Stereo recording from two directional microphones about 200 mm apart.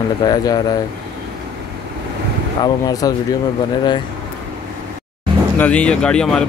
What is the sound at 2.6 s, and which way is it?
Speech, 20° left (ahead or behind).